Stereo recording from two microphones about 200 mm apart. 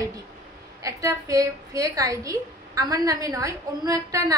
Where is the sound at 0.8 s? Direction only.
15° right (ahead or behind).